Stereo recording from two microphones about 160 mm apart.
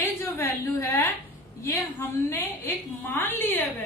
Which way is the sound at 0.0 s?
15° left (ahead or behind).